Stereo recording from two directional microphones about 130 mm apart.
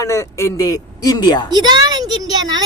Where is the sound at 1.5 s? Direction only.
35° right (ahead or behind).